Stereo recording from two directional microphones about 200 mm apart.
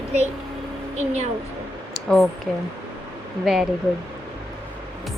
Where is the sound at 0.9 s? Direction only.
35° right (ahead or behind).